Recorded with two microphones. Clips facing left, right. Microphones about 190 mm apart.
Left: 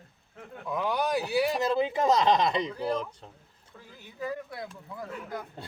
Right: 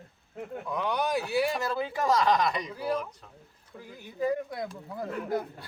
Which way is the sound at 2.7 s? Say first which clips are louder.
Even; 5° right (ahead or behind).